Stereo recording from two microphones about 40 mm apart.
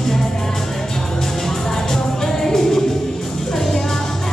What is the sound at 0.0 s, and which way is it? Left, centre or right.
Music, centre.